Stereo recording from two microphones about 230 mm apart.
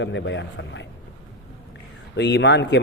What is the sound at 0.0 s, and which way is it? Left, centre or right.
Speech, left.